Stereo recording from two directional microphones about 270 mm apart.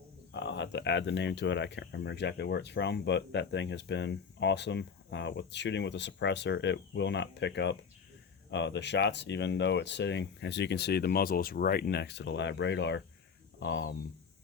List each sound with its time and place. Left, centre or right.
0.3 s speech: left